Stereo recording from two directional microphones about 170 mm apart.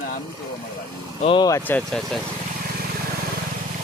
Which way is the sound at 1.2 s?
25° left (ahead or behind).